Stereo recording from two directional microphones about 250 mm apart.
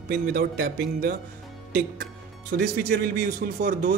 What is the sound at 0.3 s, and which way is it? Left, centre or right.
Speech, right.